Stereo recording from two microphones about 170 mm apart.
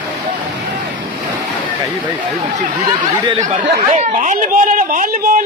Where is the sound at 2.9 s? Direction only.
25° right (ahead or behind).